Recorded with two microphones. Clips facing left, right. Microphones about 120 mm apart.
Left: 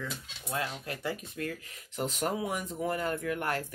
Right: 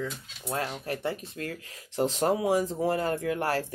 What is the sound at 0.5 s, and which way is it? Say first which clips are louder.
Speech: right 3 dB; 35° right (ahead or behind).